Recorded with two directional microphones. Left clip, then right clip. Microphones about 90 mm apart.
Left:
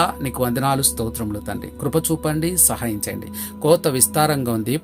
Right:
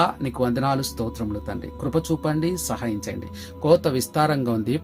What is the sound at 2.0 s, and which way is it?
A man's voice, 25° left (ahead or behind).